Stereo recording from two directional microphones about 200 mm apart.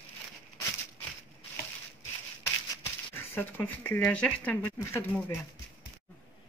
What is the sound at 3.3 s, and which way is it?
Speech, 10° left (ahead or behind).